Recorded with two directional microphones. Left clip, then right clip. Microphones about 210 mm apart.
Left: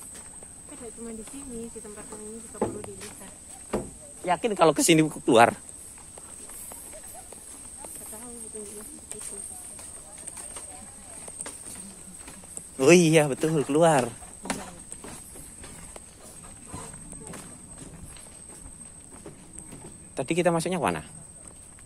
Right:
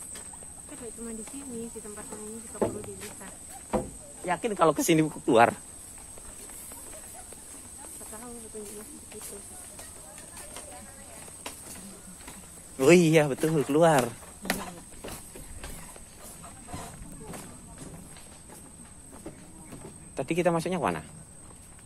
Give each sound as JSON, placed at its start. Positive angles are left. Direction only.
{"t": 4.2, "sound": "speech", "side_deg": 25}
{"t": 12.7, "sound": "a man's voice", "side_deg": 10}
{"t": 20.2, "sound": "a man's voice", "side_deg": 15}